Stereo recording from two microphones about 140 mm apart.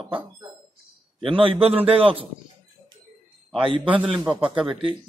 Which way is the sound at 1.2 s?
40° right (ahead or behind).